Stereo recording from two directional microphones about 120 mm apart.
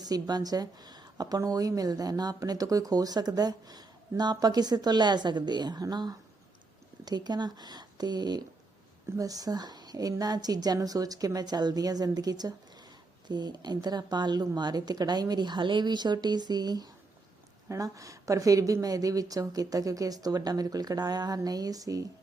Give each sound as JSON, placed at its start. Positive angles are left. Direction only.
{"t": 0.0, "sound": "speech", "side_deg": -35}